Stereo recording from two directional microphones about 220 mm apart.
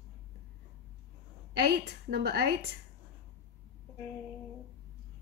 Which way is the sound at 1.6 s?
45° right (ahead or behind).